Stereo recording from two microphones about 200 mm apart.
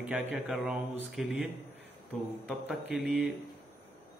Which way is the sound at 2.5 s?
Centre (ahead or behind).